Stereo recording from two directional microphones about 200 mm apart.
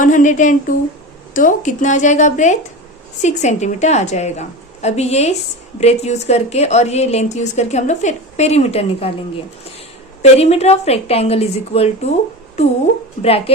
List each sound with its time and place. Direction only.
0.0 s a woman's voice: 40° left (ahead or behind)
10.3 s a woman's voice: 30° left (ahead or behind)
13.2 s speech: 30° left (ahead or behind)